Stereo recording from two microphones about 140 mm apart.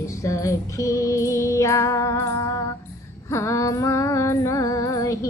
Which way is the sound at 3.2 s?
20° left (ahead or behind).